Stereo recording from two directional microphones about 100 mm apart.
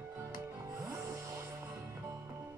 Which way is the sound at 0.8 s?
25° right (ahead or behind).